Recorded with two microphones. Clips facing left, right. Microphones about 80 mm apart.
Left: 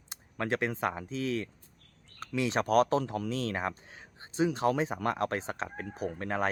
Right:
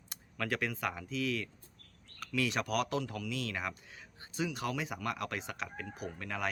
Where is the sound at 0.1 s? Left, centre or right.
Left.